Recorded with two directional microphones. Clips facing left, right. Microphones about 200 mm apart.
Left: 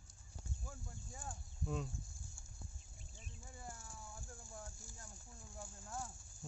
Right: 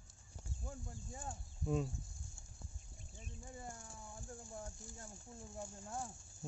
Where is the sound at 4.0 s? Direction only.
20° right (ahead or behind).